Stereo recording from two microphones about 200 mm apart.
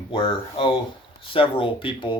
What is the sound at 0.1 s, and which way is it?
Speech, 25° left (ahead or behind).